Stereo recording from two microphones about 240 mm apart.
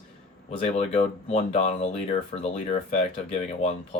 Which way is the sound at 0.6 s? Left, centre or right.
Left.